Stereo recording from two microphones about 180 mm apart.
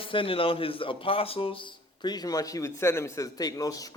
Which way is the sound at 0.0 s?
30° left (ahead or behind).